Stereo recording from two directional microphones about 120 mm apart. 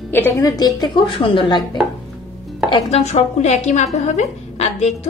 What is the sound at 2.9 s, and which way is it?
A woman's voice, 65° left (ahead or behind).